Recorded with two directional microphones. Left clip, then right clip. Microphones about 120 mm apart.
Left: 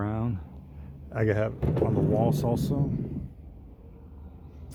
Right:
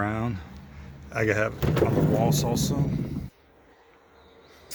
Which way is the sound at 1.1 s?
45° left (ahead or behind).